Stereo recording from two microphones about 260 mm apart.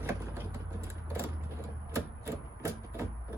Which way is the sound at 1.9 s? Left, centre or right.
Centre.